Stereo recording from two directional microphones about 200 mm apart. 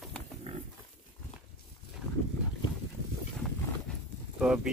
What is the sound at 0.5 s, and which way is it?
Pig, 30° right (ahead or behind).